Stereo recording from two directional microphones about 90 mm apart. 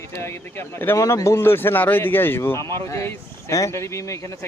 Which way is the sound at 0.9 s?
35° left (ahead or behind).